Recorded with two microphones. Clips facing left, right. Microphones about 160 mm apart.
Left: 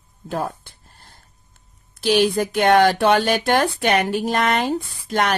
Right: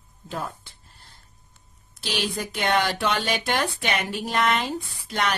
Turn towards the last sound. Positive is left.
turn(degrees=50)  # may be behind; listen again after turning